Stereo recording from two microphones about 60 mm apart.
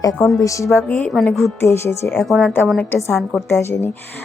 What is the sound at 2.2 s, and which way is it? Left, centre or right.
Speech, centre.